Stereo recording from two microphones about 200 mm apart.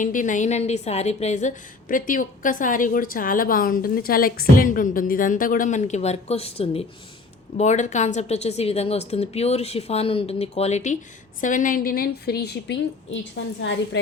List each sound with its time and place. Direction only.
0.0 s a woman's voice: 40° left (ahead or behind); by 14.0 s 65° left (ahead or behind)